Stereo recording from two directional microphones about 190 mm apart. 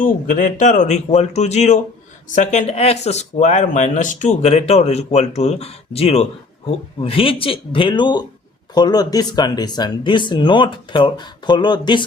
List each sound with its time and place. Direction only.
0.0 s speech: 45° left (ahead or behind); by 12.0 s 25° left (ahead or behind)